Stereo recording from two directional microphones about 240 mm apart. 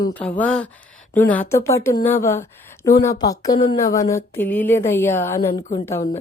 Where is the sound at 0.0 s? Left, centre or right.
Centre.